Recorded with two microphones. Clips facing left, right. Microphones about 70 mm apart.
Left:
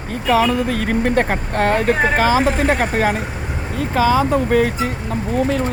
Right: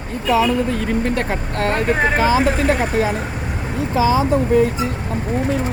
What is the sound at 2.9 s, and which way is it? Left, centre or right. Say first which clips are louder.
Speech: left 1 dB; left.